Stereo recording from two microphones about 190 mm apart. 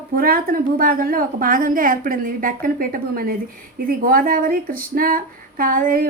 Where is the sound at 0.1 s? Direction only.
50° right (ahead or behind).